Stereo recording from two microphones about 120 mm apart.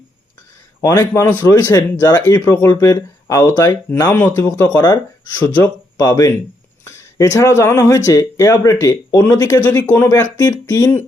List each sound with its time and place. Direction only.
0.8 s speech: 25° left (ahead or behind)
6.1 s speech: 30° left (ahead or behind)